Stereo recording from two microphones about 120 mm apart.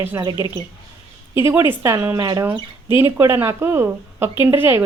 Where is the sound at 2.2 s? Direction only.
35° right (ahead or behind).